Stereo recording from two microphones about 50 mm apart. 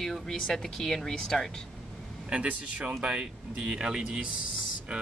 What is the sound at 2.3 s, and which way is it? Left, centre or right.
A man's voice, right.